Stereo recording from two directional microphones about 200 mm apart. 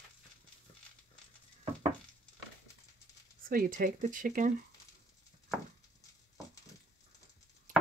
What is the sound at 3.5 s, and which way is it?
Speech, 45° right (ahead or behind).